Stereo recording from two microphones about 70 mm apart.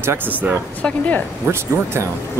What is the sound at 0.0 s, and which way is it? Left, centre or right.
Speech, right.